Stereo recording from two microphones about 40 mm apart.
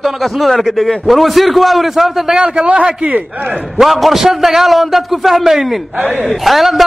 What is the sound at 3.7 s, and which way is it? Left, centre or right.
A man's voice, centre.